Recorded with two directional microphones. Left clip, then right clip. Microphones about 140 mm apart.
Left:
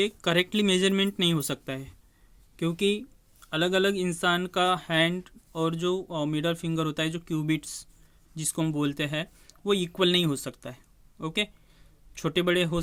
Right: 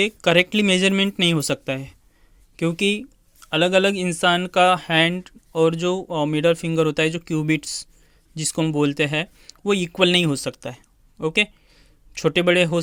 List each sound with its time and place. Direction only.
0.0 s speech: 35° right (ahead or behind)